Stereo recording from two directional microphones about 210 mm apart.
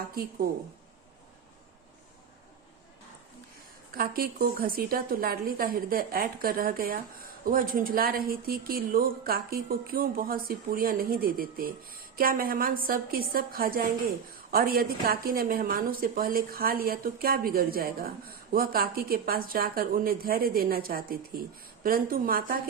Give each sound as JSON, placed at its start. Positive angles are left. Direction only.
{"t": 0.1, "sound": "a woman's voice", "side_deg": -45}
{"t": 3.9, "sound": "a woman's voice", "side_deg": -45}